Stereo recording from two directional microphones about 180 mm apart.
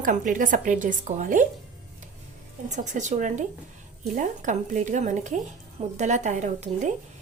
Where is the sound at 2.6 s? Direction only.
40° right (ahead or behind).